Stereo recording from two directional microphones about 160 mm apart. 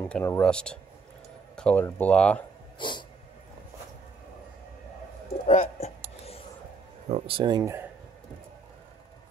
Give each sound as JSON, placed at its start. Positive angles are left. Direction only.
{"t": 0.0, "sound": "speech", "side_deg": 15}
{"t": 2.8, "sound": "dog", "side_deg": 30}
{"t": 5.5, "sound": "a sound", "side_deg": 45}
{"t": 7.1, "sound": "speech", "side_deg": -35}